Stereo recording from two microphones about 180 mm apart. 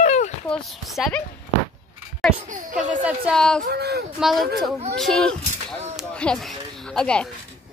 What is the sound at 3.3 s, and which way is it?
Speech, 5° left (ahead or behind).